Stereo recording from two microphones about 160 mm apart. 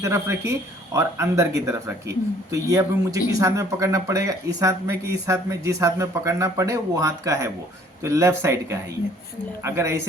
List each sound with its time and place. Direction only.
0.0 s a man's voice: 20° right (ahead or behind)
9.6 s a man's voice: 15° right (ahead or behind)